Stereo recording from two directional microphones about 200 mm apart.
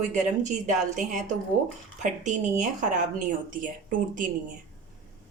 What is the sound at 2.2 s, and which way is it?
A woman's voice, 40° right (ahead or behind).